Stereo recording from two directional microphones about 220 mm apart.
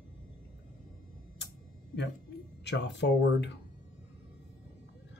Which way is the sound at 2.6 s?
50° left (ahead or behind).